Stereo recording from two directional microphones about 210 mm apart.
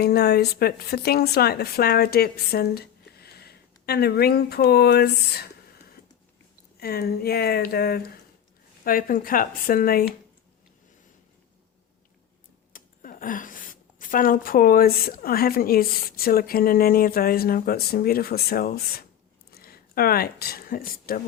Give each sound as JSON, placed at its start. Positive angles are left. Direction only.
{"t": 0.0, "sound": "a woman's voice", "side_deg": 50}
{"t": 6.7, "sound": "a woman's voice", "side_deg": 45}
{"t": 12.7, "sound": "a woman's voice", "side_deg": 40}